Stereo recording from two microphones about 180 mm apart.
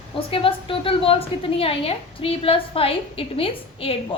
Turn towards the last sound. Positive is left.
turn(degrees=30)  # may be behind; listen again after turning